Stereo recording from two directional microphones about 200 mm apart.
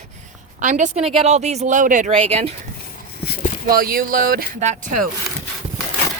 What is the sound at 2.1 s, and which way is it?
Speech, 30° right (ahead or behind).